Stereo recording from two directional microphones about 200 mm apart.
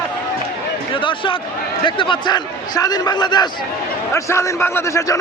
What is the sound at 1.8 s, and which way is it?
A man's voice, 25° left (ahead or behind).